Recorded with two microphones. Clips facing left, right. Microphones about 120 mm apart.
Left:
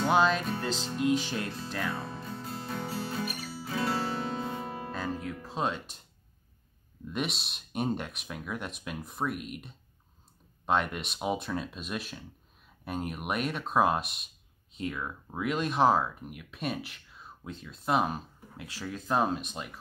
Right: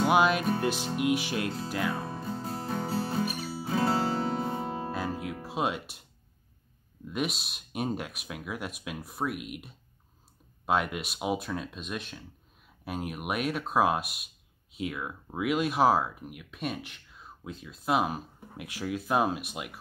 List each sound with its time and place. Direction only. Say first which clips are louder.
0.0 s music: right 1 dB; 10° right (ahead or behind)
0.6 s speech: right 3 dB; 15° right (ahead or behind)
2.2 s music: right 4 dB; 30° right (ahead or behind)
4.9 s music: right 1 dB; 10° right (ahead or behind)
7.1 s speech: right 2 dB; centre (ahead or behind)
18.6 s speech: right 5 dB; 15° right (ahead or behind)